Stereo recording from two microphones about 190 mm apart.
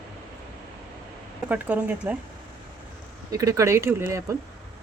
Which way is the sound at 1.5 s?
10° right (ahead or behind).